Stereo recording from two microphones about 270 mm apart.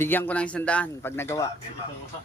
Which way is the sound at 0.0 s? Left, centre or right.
Centre.